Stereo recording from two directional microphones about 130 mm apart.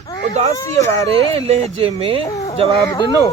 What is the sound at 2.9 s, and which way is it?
Speech, 35° left (ahead or behind).